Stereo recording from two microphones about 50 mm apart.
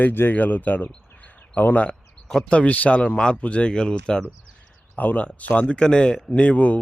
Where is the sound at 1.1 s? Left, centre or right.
Left.